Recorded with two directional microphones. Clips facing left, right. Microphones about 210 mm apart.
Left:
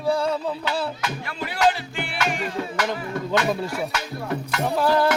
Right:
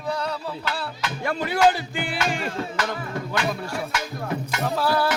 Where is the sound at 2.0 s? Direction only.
30° right (ahead or behind).